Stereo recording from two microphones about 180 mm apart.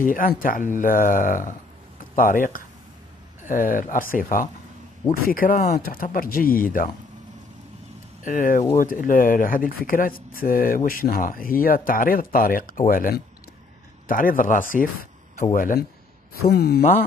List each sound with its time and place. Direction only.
0.0 s speech: 50° left (ahead or behind)
8.2 s speech: 45° left (ahead or behind)
16.3 s speech: 60° left (ahead or behind)